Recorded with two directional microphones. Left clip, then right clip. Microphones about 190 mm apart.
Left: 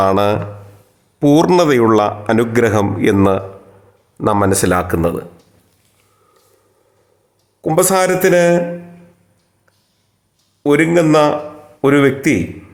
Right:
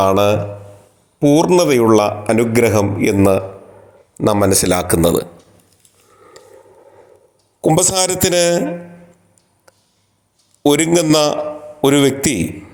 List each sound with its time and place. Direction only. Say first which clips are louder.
0.0 s a man's voice: even; 10° left (ahead or behind)
4.2 s speech: even; 10° right (ahead or behind)
7.7 s a man's voice: left 3 dB; 20° right (ahead or behind)
10.6 s a man's voice: left 1 dB; 25° right (ahead or behind)